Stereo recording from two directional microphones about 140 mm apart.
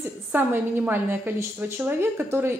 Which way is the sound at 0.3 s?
15° right (ahead or behind).